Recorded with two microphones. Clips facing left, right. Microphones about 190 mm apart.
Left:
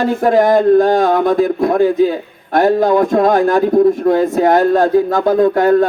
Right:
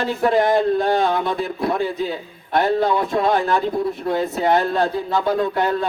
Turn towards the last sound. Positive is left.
turn(degrees=50)  # may be behind; listen again after turning